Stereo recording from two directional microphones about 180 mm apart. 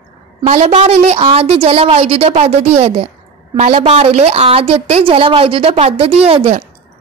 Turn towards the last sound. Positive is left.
turn(degrees=-35)  # may be behind; listen again after turning